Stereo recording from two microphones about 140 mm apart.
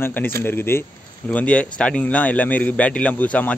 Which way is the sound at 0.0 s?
15° left (ahead or behind).